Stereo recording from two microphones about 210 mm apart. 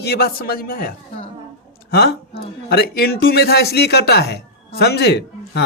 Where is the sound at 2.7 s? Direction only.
50° left (ahead or behind).